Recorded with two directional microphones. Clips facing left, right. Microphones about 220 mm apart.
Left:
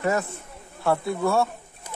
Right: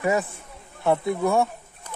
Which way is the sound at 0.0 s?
15° right (ahead or behind).